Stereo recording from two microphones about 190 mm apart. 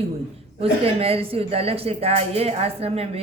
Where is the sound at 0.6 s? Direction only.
30° right (ahead or behind).